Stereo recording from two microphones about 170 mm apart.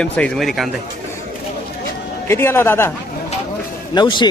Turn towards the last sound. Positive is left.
turn(degrees=25)  # may be behind; listen again after turning